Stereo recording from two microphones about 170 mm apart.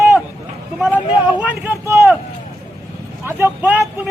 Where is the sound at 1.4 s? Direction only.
15° right (ahead or behind).